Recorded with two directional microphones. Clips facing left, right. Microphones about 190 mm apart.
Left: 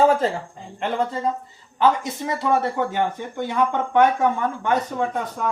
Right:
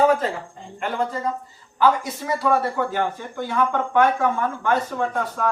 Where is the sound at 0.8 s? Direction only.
25° left (ahead or behind).